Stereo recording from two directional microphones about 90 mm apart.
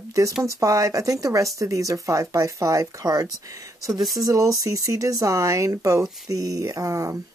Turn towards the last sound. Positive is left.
turn(degrees=-40)  # may be behind; listen again after turning